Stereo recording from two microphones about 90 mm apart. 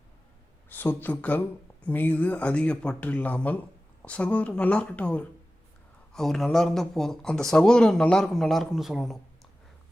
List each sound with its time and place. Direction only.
0.7 s speech: 20° left (ahead or behind)
6.1 s speech: centre (ahead or behind)